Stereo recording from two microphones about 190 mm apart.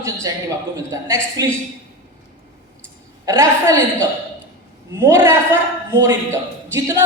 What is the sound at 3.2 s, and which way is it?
Speech, 15° right (ahead or behind).